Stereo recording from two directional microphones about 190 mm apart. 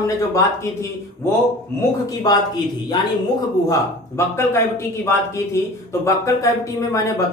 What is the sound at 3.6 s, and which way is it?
A man's voice, 15° left (ahead or behind).